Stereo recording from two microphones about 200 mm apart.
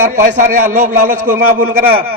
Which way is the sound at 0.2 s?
40° right (ahead or behind).